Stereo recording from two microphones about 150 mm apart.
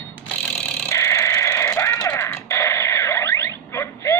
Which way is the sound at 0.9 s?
20° left (ahead or behind).